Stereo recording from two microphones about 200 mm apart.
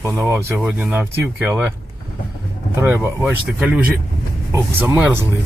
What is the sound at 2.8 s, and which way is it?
Speech, 10° right (ahead or behind).